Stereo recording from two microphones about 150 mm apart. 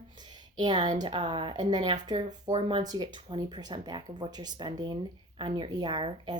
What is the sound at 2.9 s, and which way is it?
Speech, 30° right (ahead or behind).